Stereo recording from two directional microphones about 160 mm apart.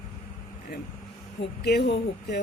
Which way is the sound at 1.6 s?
90° left.